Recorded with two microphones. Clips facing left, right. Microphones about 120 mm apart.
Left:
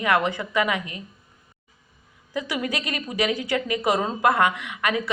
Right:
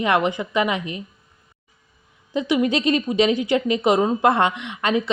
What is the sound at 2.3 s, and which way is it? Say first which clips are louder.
A woman's voice: right 8 dB; 25° right (ahead or behind).